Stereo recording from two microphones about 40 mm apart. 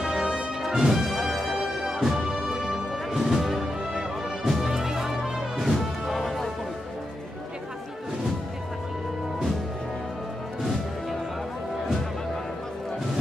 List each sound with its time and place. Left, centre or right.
0.0 s music: centre
0.6 s music: centre